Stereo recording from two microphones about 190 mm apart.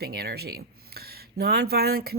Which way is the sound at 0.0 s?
55° right (ahead or behind).